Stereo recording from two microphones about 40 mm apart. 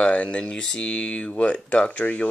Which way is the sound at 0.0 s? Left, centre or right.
Left.